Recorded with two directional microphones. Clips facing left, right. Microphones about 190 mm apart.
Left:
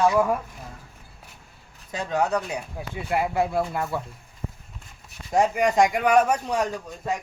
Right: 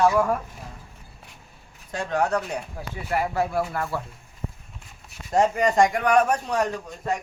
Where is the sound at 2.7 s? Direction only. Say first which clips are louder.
Left 2 dB; 15° left (ahead or behind).